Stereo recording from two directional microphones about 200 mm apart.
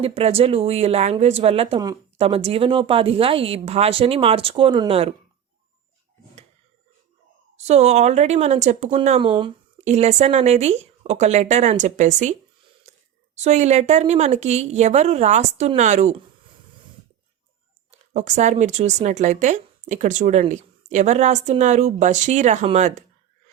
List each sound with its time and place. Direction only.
0.0 s speech: 30° right (ahead or behind)
7.5 s speech: 35° right (ahead or behind)
13.4 s speech: 35° right (ahead or behind)
18.1 s speech: 35° right (ahead or behind)